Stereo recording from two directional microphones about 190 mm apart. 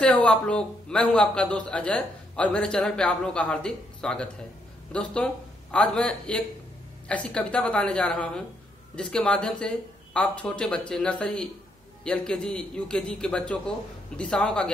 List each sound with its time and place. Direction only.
0.0 s a man's voice: 5° left (ahead or behind)